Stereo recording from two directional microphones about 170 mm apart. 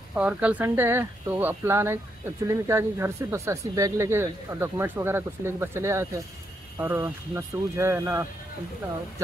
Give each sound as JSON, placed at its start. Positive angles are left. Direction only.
{"t": 0.1, "sound": "speech", "side_deg": -5}